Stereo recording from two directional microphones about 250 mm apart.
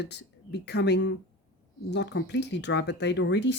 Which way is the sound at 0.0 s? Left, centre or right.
Left.